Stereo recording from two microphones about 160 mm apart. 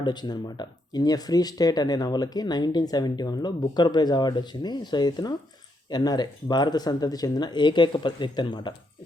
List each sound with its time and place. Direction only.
0.0 s speech: 25° left (ahead or behind)